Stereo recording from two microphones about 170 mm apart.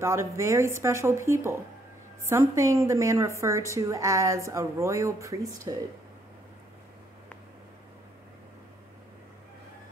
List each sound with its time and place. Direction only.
0.0 s a woman's voice: 15° right (ahead or behind)